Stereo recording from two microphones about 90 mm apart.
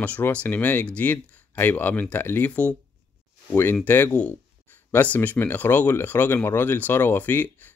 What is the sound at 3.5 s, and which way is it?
Speech, 25° left (ahead or behind).